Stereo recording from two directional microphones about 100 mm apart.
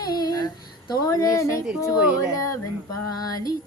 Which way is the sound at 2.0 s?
15° right (ahead or behind).